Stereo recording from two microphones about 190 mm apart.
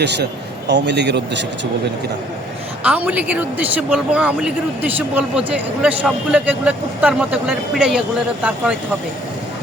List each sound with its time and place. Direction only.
0.0 s a man's voice: 65° right (ahead or behind)
2.8 s a man's voice: 5° right (ahead or behind)